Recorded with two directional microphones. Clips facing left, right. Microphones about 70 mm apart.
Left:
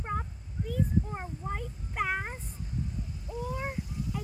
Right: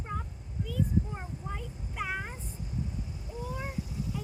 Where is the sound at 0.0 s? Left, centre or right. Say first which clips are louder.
Left 4 dB; left.